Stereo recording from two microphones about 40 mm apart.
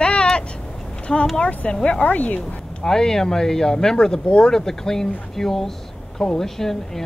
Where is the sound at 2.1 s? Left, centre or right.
Left.